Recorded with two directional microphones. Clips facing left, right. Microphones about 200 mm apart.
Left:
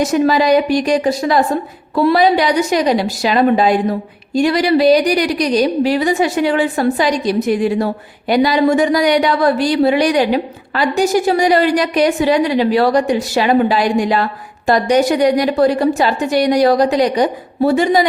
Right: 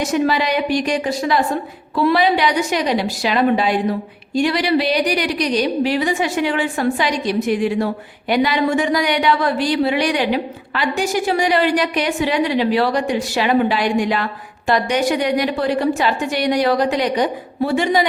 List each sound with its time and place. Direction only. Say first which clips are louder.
0.0 s speech: left 5 dB; 40° left (ahead or behind)